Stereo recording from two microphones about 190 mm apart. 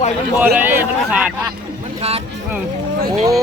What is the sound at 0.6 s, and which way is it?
Speech, 10° right (ahead or behind).